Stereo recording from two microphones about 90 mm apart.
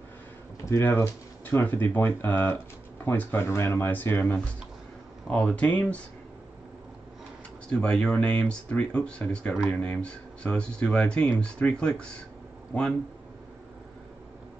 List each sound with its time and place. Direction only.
0.7 s speech: 30° left (ahead or behind); by 6.0 s 15° left (ahead or behind)
7.7 s speech: 10° left (ahead or behind)